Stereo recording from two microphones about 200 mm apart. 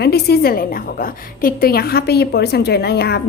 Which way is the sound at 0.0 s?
55° left (ahead or behind).